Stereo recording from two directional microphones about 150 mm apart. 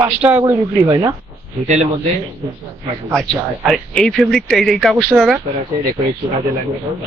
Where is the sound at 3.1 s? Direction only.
5° left (ahead or behind).